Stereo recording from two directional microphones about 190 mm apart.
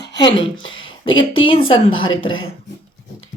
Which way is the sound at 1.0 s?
90° left.